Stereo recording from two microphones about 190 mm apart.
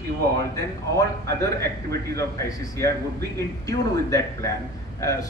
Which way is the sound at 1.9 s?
15° left (ahead or behind).